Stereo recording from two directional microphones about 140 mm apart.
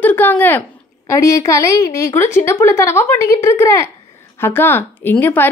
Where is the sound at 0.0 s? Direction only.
15° left (ahead or behind).